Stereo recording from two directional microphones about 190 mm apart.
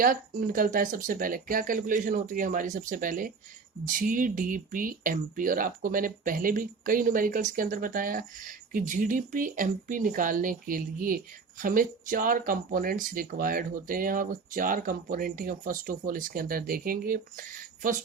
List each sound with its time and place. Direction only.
0.0 s speech: 50° right (ahead or behind)